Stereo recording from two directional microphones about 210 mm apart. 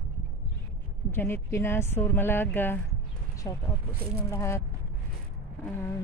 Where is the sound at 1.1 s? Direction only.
10° left (ahead or behind).